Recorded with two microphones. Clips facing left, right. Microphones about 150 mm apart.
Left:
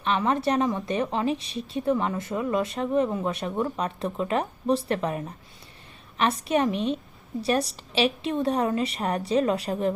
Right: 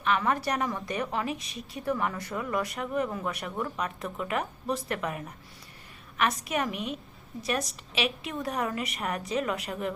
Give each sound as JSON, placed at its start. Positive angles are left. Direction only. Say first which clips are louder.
{"t": 0.0, "sound": "a woman's voice", "louder": "left 3 dB", "side_deg": 25}